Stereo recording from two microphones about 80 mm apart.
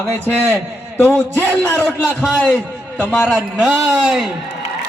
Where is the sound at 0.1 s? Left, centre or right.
Left.